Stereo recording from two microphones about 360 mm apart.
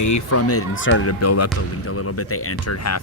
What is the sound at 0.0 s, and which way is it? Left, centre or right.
Speech, left.